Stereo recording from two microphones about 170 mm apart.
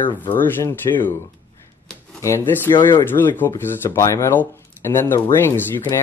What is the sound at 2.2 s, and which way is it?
Speech, 15° left (ahead or behind).